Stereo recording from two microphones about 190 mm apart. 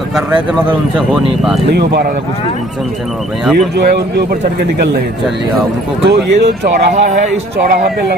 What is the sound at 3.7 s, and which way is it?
Speech, 60° right (ahead or behind).